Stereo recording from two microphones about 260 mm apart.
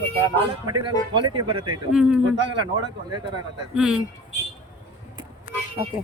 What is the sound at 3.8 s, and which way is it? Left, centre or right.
Speech, centre.